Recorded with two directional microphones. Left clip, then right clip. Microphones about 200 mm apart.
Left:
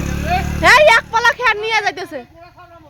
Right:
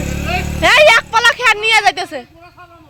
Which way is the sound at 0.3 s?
5° left (ahead or behind).